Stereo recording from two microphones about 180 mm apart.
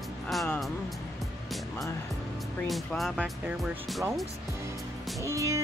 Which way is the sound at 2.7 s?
Centre (ahead or behind).